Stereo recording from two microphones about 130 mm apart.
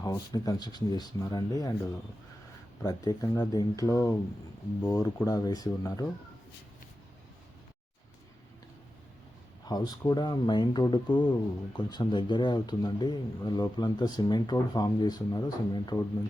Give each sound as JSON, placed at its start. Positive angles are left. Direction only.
{"t": 0.0, "sound": "speech", "side_deg": 25}
{"t": 2.8, "sound": "speech", "side_deg": 30}
{"t": 9.6, "sound": "speech", "side_deg": 30}